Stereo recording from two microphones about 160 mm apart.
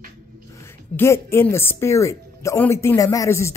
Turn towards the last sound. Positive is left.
turn(degrees=15)  # may be behind; listen again after turning